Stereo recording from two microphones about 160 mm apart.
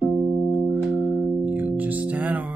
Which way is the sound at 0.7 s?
10° right (ahead or behind).